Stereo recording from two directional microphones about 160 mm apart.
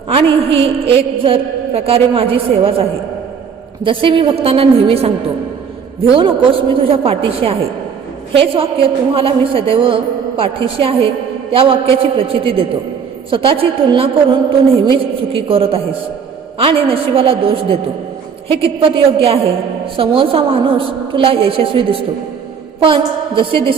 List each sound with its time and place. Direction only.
0.1 s a woman's voice: 35° right (ahead or behind)
3.8 s a woman's voice: 30° right (ahead or behind)